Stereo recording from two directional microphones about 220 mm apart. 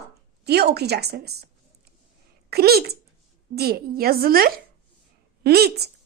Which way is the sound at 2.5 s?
45° right (ahead or behind).